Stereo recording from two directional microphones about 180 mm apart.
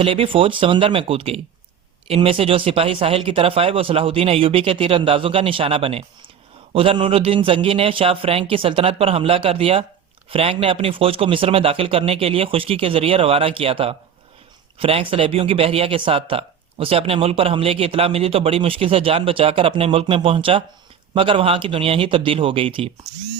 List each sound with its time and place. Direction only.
0.0 s speech: 30° right (ahead or behind)